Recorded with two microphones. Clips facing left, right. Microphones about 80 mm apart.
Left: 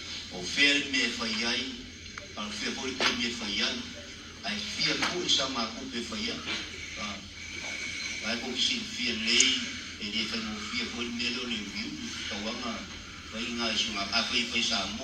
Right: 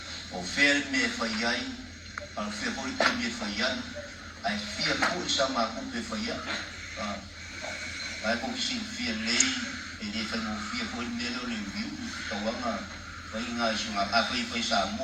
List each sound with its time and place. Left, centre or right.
0.3 s a man's voice: right
8.2 s a man's voice: right